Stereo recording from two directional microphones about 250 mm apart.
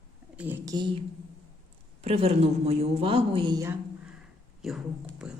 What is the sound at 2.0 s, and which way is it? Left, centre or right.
A woman's voice, right.